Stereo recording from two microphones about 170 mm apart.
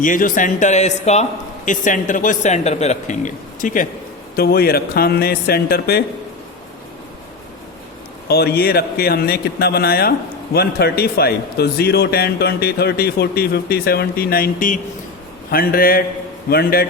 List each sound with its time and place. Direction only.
0.0 s a man's voice: 50° left (ahead or behind)
4.4 s speech: 65° left (ahead or behind)
8.3 s speech: 70° left (ahead or behind)